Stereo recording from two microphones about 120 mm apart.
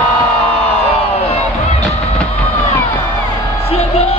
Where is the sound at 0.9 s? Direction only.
60° left (ahead or behind).